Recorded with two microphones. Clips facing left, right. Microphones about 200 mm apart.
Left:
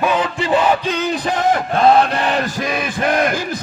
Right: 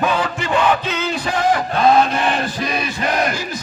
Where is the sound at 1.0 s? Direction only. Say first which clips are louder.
Left 3 dB; 15° left (ahead or behind).